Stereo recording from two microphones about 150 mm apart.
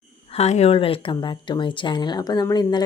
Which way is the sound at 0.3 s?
45° left (ahead or behind).